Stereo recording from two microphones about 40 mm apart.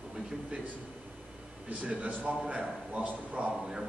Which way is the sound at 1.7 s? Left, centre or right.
Right.